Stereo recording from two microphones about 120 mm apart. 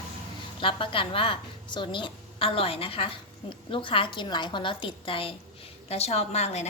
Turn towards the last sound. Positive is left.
turn(degrees=65)  # may be behind; listen again after turning